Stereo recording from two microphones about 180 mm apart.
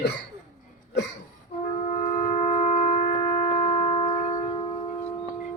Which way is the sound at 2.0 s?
40° left (ahead or behind).